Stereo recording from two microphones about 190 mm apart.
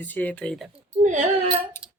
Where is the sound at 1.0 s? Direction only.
40° right (ahead or behind).